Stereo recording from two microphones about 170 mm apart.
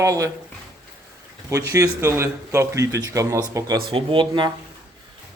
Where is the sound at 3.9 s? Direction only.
30° right (ahead or behind).